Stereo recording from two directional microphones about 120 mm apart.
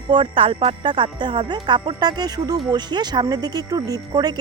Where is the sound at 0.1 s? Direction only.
45° right (ahead or behind).